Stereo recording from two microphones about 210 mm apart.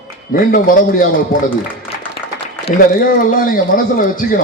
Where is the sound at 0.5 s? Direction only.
40° left (ahead or behind).